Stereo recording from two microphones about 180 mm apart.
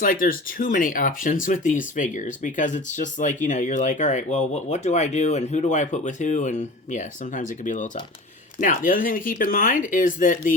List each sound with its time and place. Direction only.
0.0 s speech: 50° left (ahead or behind)